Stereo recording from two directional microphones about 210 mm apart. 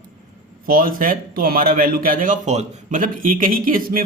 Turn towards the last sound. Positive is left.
turn(degrees=-40)  # may be behind; listen again after turning